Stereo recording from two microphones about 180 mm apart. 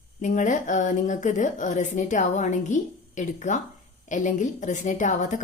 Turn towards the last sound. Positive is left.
turn(degrees=45)  # may be behind; listen again after turning